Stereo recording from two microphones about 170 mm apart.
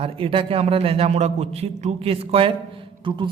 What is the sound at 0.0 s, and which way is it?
A man's voice, 30° right (ahead or behind).